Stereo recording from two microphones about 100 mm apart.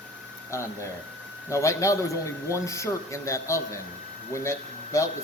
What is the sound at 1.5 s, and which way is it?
Speech, 30° left (ahead or behind).